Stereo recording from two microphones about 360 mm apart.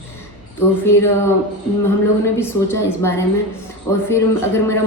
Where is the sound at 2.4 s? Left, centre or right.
Centre.